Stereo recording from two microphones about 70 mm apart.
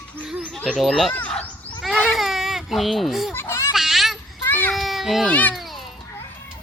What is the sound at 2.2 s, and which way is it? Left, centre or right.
Baby cry, centre.